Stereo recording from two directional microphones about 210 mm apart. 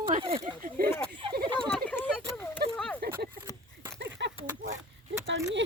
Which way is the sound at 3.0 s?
50° right (ahead or behind).